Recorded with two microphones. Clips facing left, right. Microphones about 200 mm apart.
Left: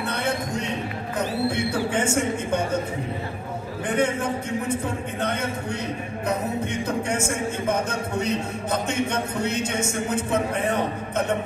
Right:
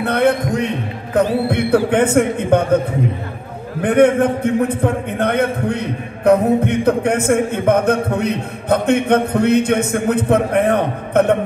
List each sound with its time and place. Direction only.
0.0 s a man's voice: 60° right (ahead or behind)
3.8 s a man's voice: 60° right (ahead or behind)